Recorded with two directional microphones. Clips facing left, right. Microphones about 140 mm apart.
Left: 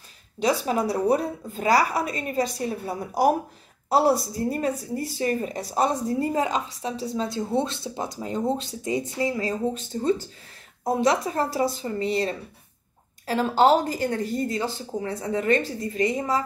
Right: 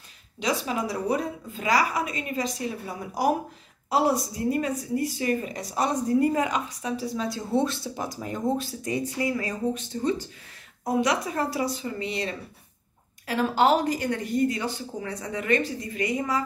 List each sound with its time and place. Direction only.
0.7 s a woman's voice: 35° left (ahead or behind)
4.5 s a woman's voice: 35° left (ahead or behind)